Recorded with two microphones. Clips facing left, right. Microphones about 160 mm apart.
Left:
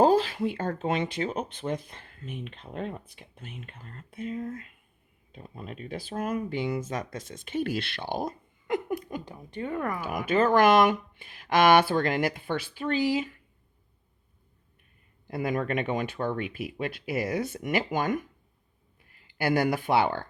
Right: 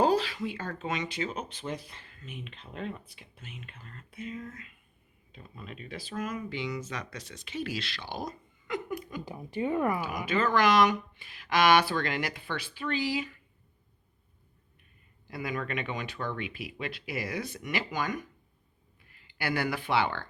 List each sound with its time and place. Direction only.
0.0 s speech: 45° left (ahead or behind)
9.2 s speech: 5° right (ahead or behind)
10.0 s speech: 50° left (ahead or behind)
15.3 s speech: 50° left (ahead or behind)
19.4 s speech: 45° left (ahead or behind)